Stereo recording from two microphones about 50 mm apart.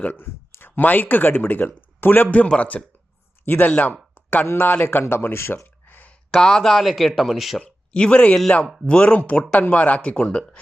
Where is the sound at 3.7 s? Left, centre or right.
Left.